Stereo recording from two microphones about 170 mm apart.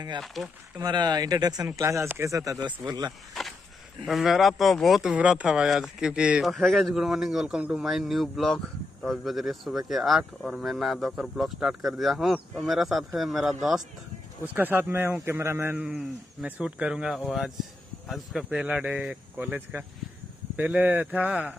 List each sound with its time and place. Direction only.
0.2 s speech: centre (ahead or behind)
0.7 s speech: 25° right (ahead or behind)
4.0 s speech: centre (ahead or behind)